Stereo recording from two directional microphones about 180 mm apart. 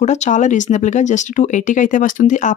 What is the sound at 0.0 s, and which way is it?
Speech, 40° left (ahead or behind).